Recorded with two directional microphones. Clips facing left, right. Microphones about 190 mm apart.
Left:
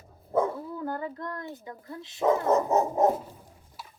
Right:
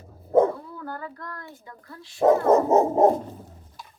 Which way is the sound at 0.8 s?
20° left (ahead or behind).